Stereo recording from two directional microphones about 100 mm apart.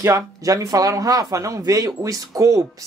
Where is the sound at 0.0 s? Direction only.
35° right (ahead or behind).